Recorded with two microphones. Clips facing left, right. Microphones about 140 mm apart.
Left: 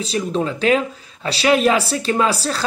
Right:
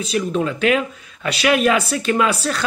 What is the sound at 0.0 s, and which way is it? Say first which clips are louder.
Speech: right 1 dB; 30° left (ahead or behind).